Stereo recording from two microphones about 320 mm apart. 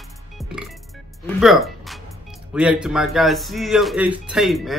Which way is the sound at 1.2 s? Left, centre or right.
Centre.